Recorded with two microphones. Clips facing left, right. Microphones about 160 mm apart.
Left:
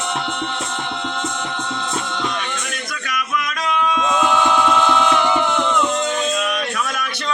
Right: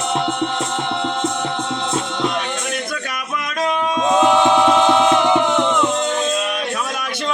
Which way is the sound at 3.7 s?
30° right (ahead or behind).